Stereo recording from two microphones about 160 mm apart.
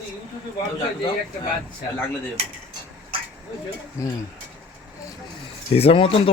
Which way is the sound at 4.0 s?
20° left (ahead or behind).